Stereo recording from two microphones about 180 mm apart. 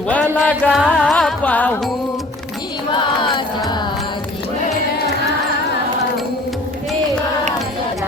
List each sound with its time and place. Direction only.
0.1 s music: 10° left (ahead or behind)